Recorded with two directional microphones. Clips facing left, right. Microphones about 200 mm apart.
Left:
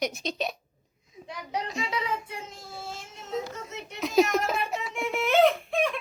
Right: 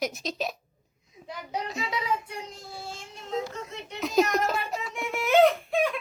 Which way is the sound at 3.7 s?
Centre (ahead or behind).